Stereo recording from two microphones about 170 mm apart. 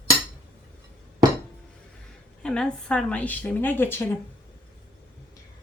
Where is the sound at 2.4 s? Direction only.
5° left (ahead or behind).